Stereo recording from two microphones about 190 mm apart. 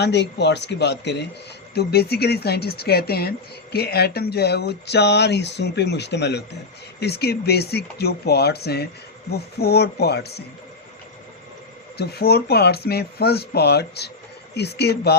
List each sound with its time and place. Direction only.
0.0 s speech: 65° left (ahead or behind)
11.9 s speech: 60° left (ahead or behind)